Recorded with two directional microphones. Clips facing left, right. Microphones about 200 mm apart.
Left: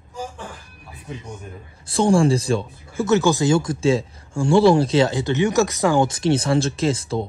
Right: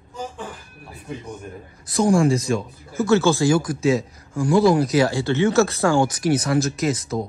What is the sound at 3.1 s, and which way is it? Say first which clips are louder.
Speech: even; 15° left (ahead or behind).